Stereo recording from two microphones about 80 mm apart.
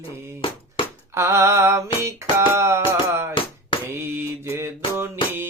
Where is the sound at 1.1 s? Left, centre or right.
Right.